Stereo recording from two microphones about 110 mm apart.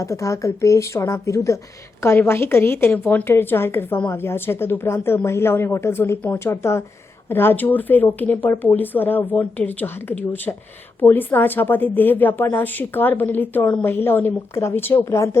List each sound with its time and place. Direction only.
0.0 s a woman's voice: 30° left (ahead or behind)